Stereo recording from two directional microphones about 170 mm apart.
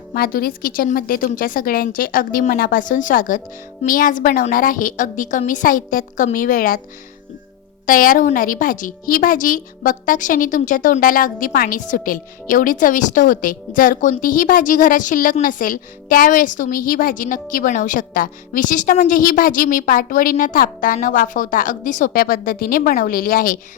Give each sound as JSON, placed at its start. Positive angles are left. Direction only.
{"t": 0.1, "sound": "a woman's voice", "side_deg": 60}
{"t": 7.9, "sound": "a woman's voice", "side_deg": 55}